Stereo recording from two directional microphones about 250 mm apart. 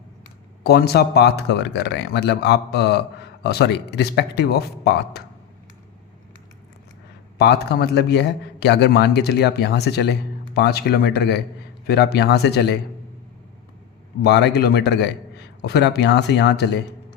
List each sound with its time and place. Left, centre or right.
0.6 s a man's voice: left
7.3 s a man's voice: left
14.3 s speech: left